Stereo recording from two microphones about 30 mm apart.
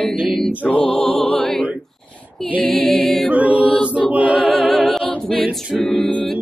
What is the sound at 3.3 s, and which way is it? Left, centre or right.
Mantra, right.